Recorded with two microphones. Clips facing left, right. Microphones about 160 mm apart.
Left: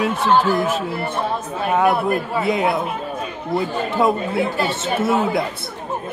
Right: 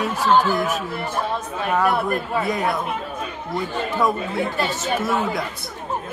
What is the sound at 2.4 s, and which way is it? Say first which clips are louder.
Speech: left 6 dB; 25° left (ahead or behind).